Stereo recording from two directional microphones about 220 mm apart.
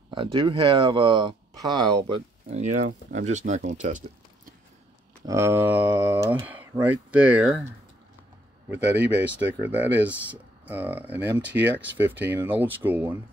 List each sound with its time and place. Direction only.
0.1 s speech: 25° right (ahead or behind)
2.5 s speech: 30° right (ahead or behind)
5.2 s speech: 15° right (ahead or behind)
8.6 s speech: 10° right (ahead or behind)